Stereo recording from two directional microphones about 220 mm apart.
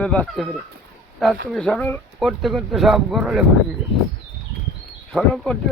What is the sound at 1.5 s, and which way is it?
Speech, 5° left (ahead or behind).